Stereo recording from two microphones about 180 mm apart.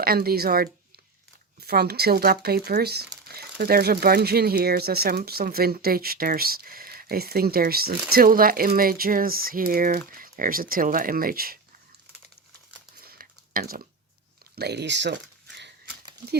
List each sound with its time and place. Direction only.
0.0 s speech: 55° right (ahead or behind)
13.1 s a sound: 55° right (ahead or behind)
14.5 s speech: 65° right (ahead or behind)